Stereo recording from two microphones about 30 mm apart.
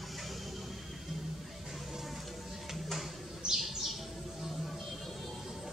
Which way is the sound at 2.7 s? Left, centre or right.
Centre.